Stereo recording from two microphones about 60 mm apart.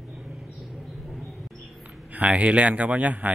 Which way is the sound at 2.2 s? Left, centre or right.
Right.